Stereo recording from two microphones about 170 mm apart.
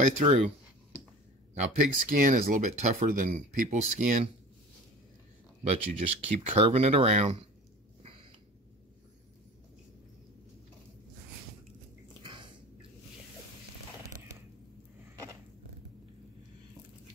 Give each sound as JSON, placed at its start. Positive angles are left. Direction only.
{"t": 0.0, "sound": "speech", "side_deg": -45}
{"t": 1.9, "sound": "speech", "side_deg": -50}
{"t": 5.6, "sound": "speech", "side_deg": -40}
{"t": 12.2, "sound": "a sound", "side_deg": -30}